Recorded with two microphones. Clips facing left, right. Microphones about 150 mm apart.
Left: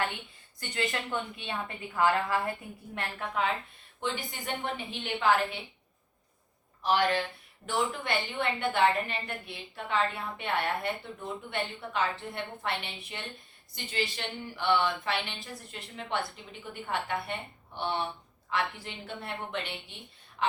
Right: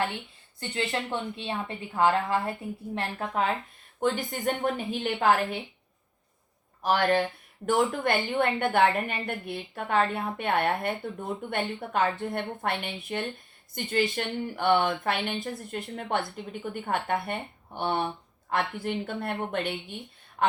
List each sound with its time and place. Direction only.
0.7 s a woman's voice: 30° right (ahead or behind)
2.9 s a woman's voice: 40° right (ahead or behind)
6.8 s a woman's voice: 45° right (ahead or behind)